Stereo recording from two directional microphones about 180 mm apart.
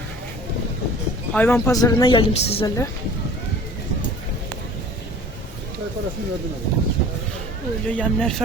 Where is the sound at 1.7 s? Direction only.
20° left (ahead or behind).